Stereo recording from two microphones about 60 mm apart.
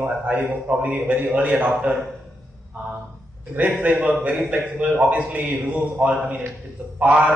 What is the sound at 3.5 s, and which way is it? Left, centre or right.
A man's voice, right.